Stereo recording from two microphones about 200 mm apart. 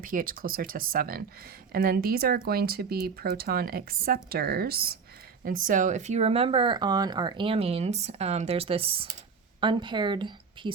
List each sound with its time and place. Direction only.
0.0 s speech: 45° right (ahead or behind); by 10.7 s 25° right (ahead or behind)